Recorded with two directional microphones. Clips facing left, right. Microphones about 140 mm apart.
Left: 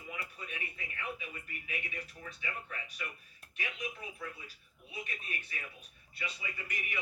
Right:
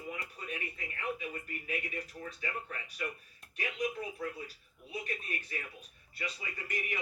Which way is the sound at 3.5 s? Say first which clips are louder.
Right 6 dB; 35° right (ahead or behind).